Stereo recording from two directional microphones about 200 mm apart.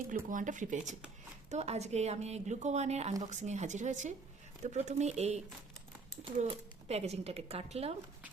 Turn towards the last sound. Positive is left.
turn(degrees=-30)  # may be behind; listen again after turning